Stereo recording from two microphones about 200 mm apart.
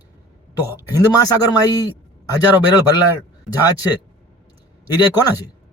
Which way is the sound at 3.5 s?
15° left (ahead or behind).